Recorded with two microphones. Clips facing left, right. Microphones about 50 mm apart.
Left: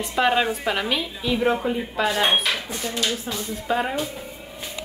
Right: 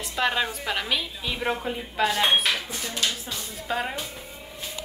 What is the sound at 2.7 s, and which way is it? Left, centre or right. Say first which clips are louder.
Speech: left 3 dB; left.